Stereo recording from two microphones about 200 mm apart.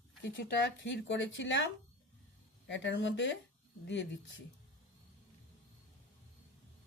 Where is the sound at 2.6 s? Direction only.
65° left (ahead or behind).